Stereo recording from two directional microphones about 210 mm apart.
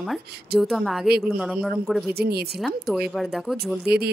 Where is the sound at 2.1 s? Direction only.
50° right (ahead or behind).